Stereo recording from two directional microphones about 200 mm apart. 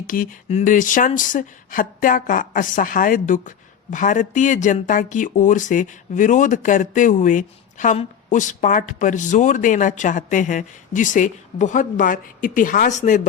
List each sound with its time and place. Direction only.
0.1 s speech: 45° left (ahead or behind)